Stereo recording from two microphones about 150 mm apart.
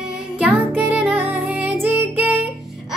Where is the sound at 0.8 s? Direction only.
10° right (ahead or behind).